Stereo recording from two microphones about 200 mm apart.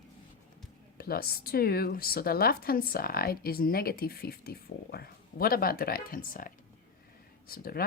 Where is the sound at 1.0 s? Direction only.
50° left (ahead or behind).